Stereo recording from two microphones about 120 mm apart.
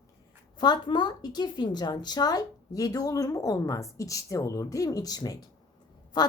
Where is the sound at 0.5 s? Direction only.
35° left (ahead or behind).